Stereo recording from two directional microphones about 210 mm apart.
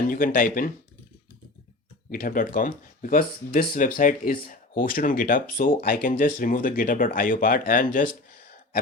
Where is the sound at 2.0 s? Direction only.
40° left (ahead or behind).